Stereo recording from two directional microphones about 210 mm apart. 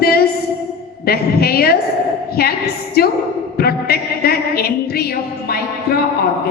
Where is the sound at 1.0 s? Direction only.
45° left (ahead or behind).